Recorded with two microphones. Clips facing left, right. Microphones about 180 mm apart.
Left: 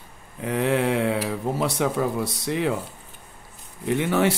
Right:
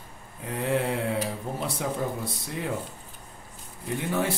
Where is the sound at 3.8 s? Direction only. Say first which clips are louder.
Left 7 dB; 80° left.